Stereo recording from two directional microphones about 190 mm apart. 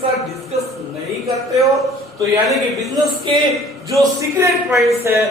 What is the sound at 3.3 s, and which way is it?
A man's voice, 25° right (ahead or behind).